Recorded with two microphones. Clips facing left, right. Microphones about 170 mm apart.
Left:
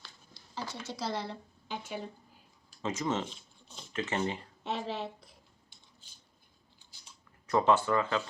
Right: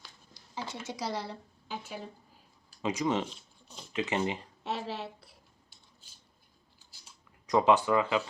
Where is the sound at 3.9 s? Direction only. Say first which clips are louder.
Right 2 dB; 15° right (ahead or behind).